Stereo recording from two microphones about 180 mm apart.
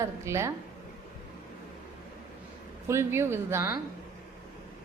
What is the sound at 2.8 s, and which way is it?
Speech, 15° right (ahead or behind).